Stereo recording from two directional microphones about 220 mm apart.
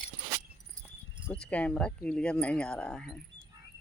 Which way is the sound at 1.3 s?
5° left (ahead or behind).